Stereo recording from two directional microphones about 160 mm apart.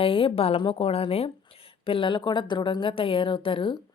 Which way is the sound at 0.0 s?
35° left (ahead or behind).